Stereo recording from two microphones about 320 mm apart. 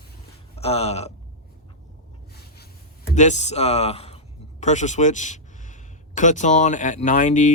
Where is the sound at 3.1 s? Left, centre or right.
Left.